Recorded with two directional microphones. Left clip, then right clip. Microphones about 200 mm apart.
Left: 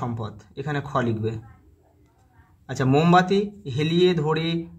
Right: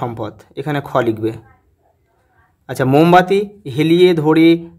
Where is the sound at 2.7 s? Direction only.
50° right (ahead or behind).